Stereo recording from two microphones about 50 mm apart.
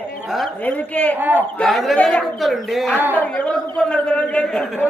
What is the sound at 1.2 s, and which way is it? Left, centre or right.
Speech, right.